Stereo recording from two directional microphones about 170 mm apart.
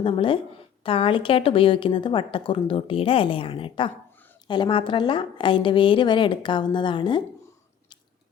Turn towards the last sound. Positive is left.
turn(degrees=30)  # may be behind; listen again after turning